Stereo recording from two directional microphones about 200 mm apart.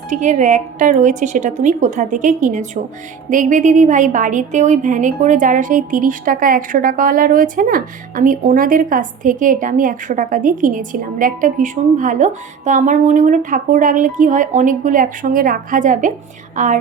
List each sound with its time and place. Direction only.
0.1 s a woman's voice: 40° right (ahead or behind)